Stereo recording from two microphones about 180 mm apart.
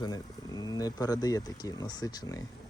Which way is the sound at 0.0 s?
20° left (ahead or behind).